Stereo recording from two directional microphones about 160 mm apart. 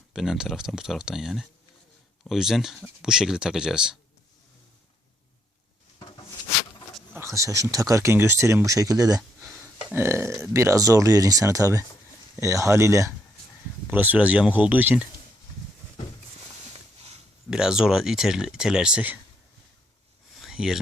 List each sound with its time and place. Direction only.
0.1 s speech: 5° right (ahead or behind)
7.1 s speech: 15° right (ahead or behind)
17.5 s speech: 5° right (ahead or behind)
20.4 s a sound: 5° right (ahead or behind)